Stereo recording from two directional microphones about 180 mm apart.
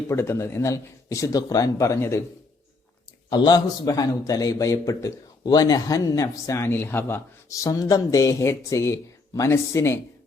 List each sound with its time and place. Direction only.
0.1 s speech: 15° left (ahead or behind)
3.2 s a man's voice: 25° left (ahead or behind)